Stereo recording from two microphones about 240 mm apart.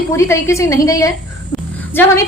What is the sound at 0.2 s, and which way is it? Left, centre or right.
A woman's voice, centre.